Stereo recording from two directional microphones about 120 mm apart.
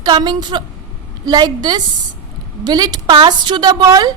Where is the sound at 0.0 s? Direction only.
35° right (ahead or behind).